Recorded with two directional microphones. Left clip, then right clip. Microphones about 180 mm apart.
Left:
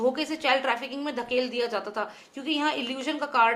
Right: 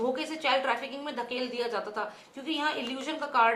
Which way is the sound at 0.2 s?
45° left (ahead or behind).